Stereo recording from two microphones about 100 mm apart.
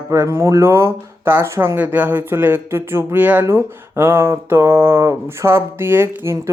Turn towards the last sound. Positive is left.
turn(degrees=-25)  # may be behind; listen again after turning